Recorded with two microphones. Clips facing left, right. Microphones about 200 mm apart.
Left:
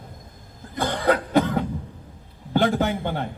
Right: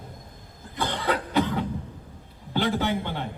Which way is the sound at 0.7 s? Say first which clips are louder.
Left 5 dB; 45° left (ahead or behind).